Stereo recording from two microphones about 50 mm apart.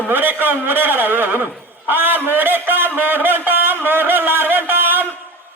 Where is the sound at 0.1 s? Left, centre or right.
Right.